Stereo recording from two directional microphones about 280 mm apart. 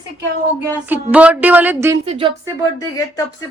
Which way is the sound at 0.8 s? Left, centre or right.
Centre.